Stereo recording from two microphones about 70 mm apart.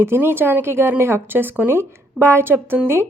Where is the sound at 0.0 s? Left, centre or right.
Right.